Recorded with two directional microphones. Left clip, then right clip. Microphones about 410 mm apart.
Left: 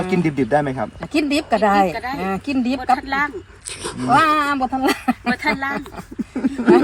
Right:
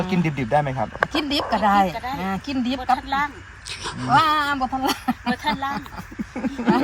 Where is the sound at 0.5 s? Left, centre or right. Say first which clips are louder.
Even; centre.